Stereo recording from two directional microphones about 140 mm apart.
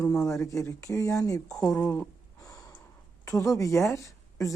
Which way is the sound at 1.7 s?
10° left (ahead or behind).